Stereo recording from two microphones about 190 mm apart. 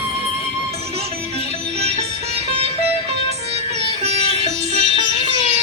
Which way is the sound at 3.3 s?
35° right (ahead or behind).